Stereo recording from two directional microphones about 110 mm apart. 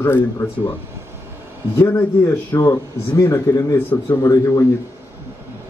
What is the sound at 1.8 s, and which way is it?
Speech, 25° left (ahead or behind).